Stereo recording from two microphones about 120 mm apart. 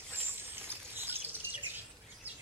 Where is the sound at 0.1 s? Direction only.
20° right (ahead or behind).